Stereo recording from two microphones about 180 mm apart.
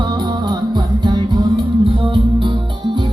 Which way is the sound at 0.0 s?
25° right (ahead or behind).